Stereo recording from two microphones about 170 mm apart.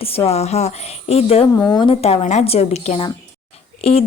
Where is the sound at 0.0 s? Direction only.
35° left (ahead or behind).